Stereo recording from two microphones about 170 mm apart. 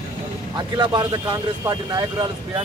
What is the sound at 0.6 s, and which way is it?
Speech, 25° right (ahead or behind).